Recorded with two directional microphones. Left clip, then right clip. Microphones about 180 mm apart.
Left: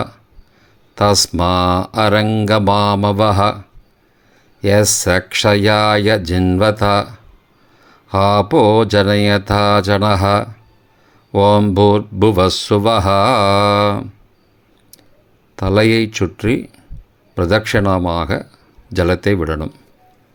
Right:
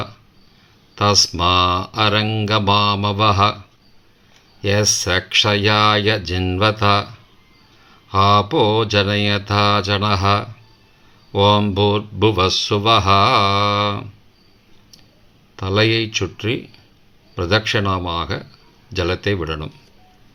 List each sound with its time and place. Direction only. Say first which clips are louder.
0.9 s speech: left 2 dB; 50° left (ahead or behind)
4.6 s speech: left 4 dB; 50° left (ahead or behind)
15.5 s speech: left 4 dB; 50° left (ahead or behind)